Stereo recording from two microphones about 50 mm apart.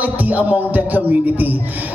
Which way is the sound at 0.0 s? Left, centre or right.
Right.